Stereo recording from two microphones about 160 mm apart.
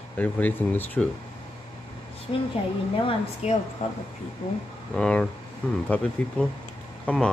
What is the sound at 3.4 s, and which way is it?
Speech, 45° left (ahead or behind).